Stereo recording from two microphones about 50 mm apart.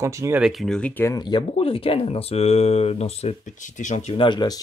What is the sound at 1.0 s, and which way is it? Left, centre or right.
Speech, left.